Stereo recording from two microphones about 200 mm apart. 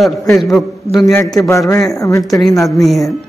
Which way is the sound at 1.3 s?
15° left (ahead or behind).